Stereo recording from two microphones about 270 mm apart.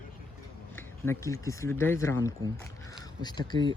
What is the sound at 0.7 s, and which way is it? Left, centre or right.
Speech, centre.